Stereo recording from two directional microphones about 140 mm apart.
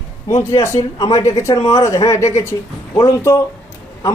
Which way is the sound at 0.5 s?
20° left (ahead or behind).